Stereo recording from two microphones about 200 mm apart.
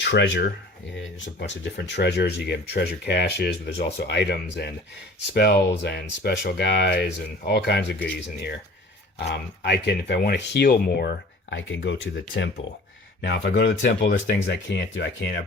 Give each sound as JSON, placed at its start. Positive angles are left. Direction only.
{"t": 0.0, "sound": "speech", "side_deg": 60}
{"t": 9.1, "sound": "speech", "side_deg": 60}
{"t": 11.5, "sound": "speech", "side_deg": 65}